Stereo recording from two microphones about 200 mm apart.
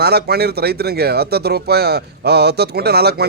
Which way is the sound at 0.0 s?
55° right (ahead or behind).